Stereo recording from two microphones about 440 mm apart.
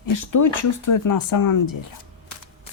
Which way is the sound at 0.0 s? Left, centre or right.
Left.